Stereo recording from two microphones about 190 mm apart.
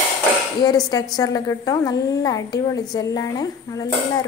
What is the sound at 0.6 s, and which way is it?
A woman's voice, 20° left (ahead or behind).